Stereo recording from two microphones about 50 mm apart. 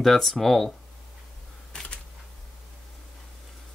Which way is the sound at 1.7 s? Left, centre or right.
Centre.